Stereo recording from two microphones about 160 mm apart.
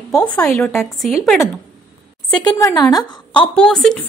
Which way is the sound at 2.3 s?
25° left (ahead or behind).